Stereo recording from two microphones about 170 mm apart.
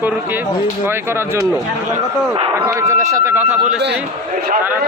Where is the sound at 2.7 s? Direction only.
15° right (ahead or behind).